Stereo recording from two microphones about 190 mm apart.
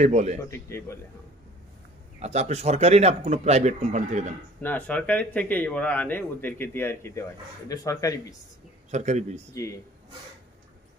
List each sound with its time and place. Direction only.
0.0 s speech: 35° right (ahead or behind)
0.4 s speech: 15° left (ahead or behind)
2.2 s speech: 35° right (ahead or behind)
4.6 s speech: 10° left (ahead or behind)
8.9 s speech: 35° right (ahead or behind)
9.5 s speech: 15° left (ahead or behind)